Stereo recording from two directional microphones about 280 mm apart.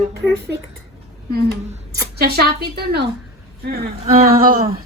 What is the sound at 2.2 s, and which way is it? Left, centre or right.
A woman's voice, right.